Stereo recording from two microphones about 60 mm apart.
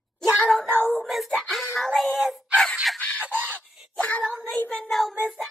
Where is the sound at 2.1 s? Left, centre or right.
Centre.